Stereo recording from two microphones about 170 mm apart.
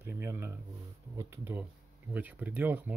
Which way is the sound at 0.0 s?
15° right (ahead or behind).